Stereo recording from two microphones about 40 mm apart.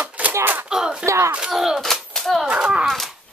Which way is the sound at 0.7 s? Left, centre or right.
Centre.